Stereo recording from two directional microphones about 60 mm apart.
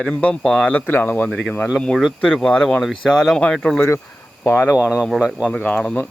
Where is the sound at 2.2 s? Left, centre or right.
Centre.